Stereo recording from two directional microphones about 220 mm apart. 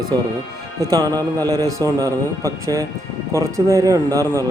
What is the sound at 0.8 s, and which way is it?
A man's voice, 15° right (ahead or behind).